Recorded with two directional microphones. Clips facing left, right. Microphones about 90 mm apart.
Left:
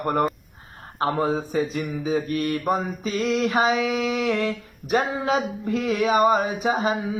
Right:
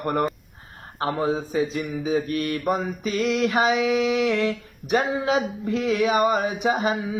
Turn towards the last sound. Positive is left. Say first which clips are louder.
# even
turn(degrees=35)  # may be behind; listen again after turning